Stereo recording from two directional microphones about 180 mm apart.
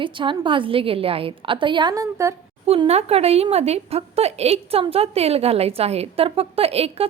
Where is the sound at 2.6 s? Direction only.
35° right (ahead or behind).